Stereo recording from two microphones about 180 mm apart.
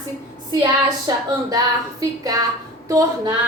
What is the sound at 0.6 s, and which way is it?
A woman's voice, 20° right (ahead or behind).